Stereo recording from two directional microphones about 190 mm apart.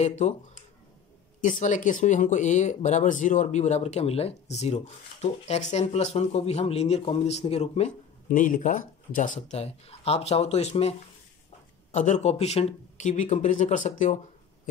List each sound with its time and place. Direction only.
0.0 s speech: 40° left (ahead or behind)
1.4 s speech: 40° left (ahead or behind)